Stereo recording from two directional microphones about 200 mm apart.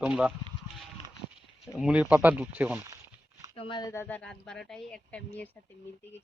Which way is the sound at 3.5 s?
25° left (ahead or behind).